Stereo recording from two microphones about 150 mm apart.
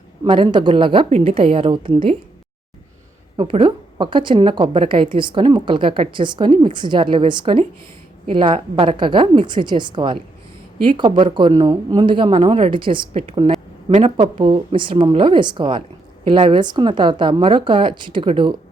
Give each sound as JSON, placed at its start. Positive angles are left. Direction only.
{"t": 0.3, "sound": "a woman's voice", "side_deg": -30}
{"t": 3.3, "sound": "a woman's voice", "side_deg": -35}
{"t": 13.5, "sound": "a sound", "side_deg": -45}
{"t": 14.2, "sound": "a woman's voice", "side_deg": -35}